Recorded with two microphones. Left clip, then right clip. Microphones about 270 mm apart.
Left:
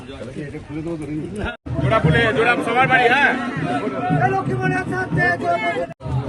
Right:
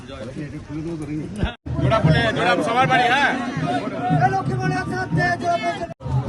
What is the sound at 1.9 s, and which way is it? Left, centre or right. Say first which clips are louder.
Speech: left 2 dB; right.